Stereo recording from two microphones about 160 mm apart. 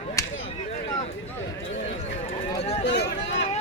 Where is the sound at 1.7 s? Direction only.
40° left (ahead or behind).